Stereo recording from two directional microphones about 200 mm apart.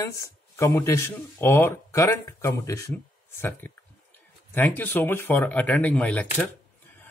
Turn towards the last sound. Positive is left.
turn(degrees=5)  # may be behind; listen again after turning